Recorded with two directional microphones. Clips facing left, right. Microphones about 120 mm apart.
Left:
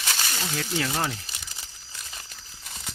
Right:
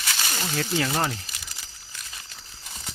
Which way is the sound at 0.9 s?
15° right (ahead or behind).